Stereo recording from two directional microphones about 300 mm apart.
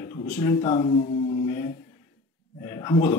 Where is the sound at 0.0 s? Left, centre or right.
Centre.